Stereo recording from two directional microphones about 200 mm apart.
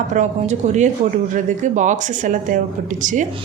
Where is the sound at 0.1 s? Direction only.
35° right (ahead or behind).